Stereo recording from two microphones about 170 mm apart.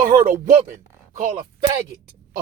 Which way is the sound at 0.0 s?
50° right (ahead or behind).